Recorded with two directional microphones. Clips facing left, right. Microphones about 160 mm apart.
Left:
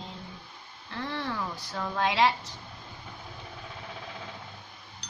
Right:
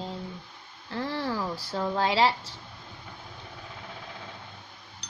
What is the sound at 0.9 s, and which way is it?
A woman's voice, 35° right (ahead or behind).